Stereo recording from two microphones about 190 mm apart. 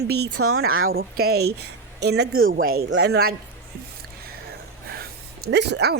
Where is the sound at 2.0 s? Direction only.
75° right (ahead or behind).